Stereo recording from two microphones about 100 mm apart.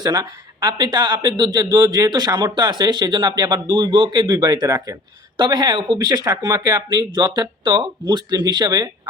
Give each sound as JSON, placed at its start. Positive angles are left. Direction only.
{"t": 0.0, "sound": "speech", "side_deg": -40}